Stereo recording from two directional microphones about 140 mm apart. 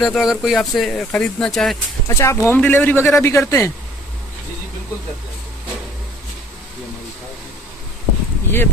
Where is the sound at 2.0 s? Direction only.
20° left (ahead or behind).